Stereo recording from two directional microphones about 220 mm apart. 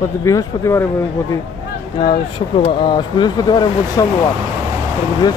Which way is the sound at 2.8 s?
20° left (ahead or behind).